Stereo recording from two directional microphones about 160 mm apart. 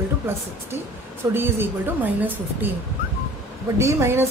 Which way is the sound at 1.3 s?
15° right (ahead or behind).